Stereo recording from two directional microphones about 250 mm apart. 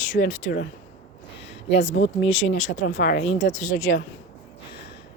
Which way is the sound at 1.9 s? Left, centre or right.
Left.